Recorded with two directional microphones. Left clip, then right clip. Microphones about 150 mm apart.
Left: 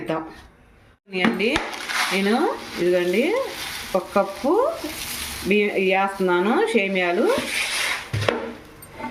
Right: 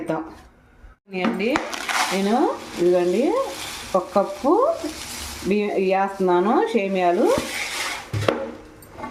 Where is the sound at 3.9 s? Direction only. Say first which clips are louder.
Right 2 dB; 20° left (ahead or behind).